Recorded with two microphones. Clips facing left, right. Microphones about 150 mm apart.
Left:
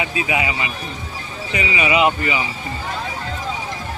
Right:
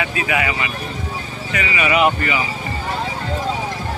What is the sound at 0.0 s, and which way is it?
Speech, 20° left (ahead or behind).